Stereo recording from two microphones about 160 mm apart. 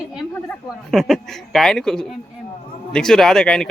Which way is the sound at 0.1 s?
Centre (ahead or behind).